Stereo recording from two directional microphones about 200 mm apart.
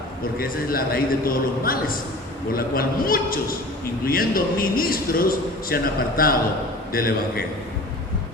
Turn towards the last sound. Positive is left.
turn(degrees=50)  # may be behind; listen again after turning